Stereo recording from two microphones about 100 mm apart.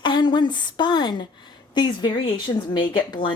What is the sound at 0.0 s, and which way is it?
Speech, 50° left (ahead or behind).